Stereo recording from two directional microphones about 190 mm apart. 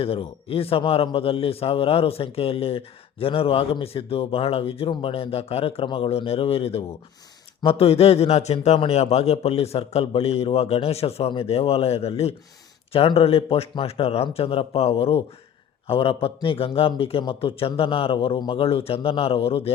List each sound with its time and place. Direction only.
0.0 s a man's voice: 30° left (ahead or behind)